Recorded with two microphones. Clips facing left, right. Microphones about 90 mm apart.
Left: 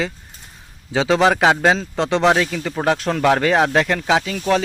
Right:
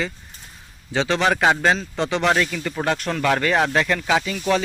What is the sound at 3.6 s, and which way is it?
Speech, 25° left (ahead or behind).